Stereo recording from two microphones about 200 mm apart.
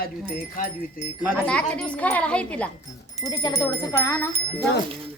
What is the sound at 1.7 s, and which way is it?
Speech, 5° left (ahead or behind).